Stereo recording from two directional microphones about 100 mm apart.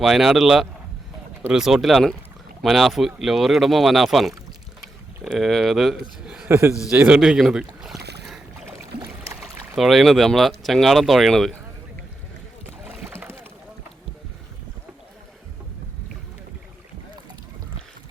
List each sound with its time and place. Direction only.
0.0 s speech: 5° right (ahead or behind)
4.8 s boat: centre (ahead or behind)
6.5 s a man's voice: 25° right (ahead or behind)
7.1 s speech: 5° right (ahead or behind)
9.4 s speech: centre (ahead or behind)
12.8 s boat: 10° right (ahead or behind)